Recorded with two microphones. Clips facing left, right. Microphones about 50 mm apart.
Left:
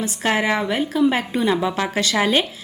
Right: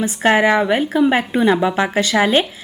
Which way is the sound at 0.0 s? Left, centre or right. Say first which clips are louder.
Right 6 dB; right.